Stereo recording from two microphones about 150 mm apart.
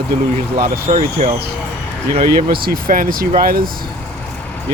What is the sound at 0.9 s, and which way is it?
Speech, 45° right (ahead or behind).